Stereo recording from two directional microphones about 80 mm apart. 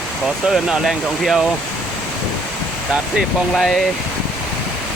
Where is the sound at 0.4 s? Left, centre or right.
Centre.